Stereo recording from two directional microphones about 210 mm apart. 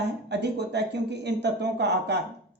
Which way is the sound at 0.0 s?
55° right (ahead or behind).